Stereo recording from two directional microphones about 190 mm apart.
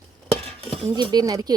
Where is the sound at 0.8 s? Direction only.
25° right (ahead or behind).